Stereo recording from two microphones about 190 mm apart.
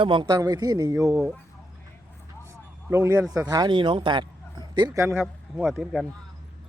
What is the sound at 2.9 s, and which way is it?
A man's voice, 15° right (ahead or behind).